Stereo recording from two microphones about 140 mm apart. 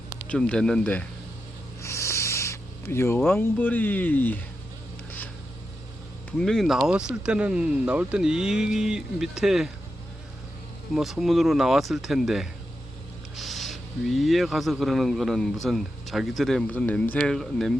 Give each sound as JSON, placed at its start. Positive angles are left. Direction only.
{"t": 0.3, "sound": "speech", "side_deg": 5}
{"t": 1.8, "sound": "a sound", "side_deg": 20}
{"t": 3.2, "sound": "speech", "side_deg": 15}
{"t": 6.4, "sound": "speech", "side_deg": 0}
{"t": 10.9, "sound": "speech", "side_deg": 0}